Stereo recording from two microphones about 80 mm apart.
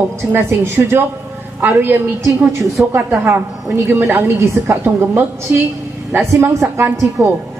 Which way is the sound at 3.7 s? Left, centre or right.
Right.